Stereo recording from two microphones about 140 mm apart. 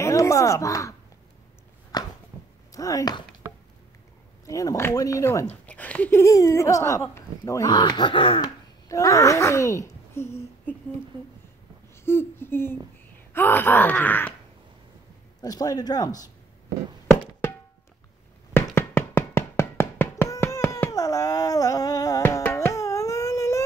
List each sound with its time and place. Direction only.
0.0 s speech: 20° left (ahead or behind)
1.9 s a sound: 30° left (ahead or behind)
2.7 s speech: 25° left (ahead or behind)
4.5 s speech: 25° left (ahead or behind)
5.5 s speech: 10° left (ahead or behind)
7.7 s speech: 30° left (ahead or behind)
8.8 s speech: 25° left (ahead or behind)
11.9 s a sound: 15° left (ahead or behind)
13.3 s speech: 15° left (ahead or behind)
15.4 s speech: 25° left (ahead or behind)
18.8 s a sound: 15° left (ahead or behind)